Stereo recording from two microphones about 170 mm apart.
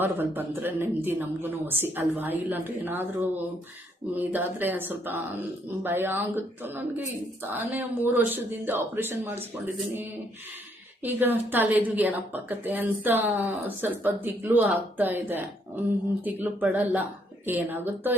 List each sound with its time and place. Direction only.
0.0 s speech: 10° right (ahead or behind)
11.0 s speech: 10° right (ahead or behind)